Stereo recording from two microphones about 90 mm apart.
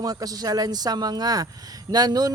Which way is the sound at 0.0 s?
45° right (ahead or behind).